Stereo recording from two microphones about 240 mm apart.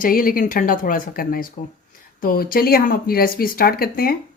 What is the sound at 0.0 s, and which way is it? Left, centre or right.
Speech, left.